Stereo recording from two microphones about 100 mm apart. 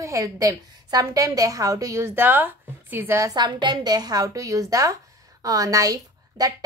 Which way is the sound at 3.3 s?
45° right (ahead or behind).